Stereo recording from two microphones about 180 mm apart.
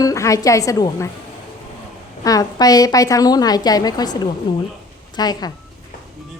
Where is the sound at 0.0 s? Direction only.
15° left (ahead or behind).